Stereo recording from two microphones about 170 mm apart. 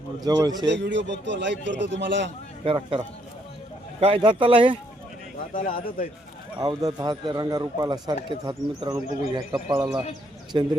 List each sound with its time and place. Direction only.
0.2 s a man's voice: 20° right (ahead or behind)
0.6 s a man's voice: 90° right
4.0 s speech: 30° right (ahead or behind)
5.5 s speech: 50° left (ahead or behind)
6.6 s a man's voice: 20° right (ahead or behind)
10.5 s a man's voice: 30° right (ahead or behind)